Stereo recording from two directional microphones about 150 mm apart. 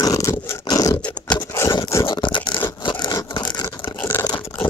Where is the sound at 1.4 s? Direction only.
20° left (ahead or behind).